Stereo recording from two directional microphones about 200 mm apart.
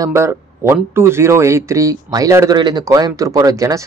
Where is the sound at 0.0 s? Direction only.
15° right (ahead or behind).